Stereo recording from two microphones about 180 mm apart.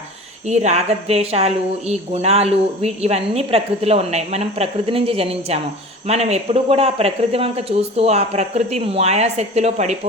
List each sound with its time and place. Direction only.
0.4 s speech: 40° right (ahead or behind)